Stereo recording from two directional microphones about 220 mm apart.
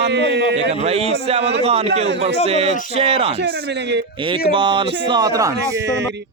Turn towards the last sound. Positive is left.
turn(degrees=-15)  # may be behind; listen again after turning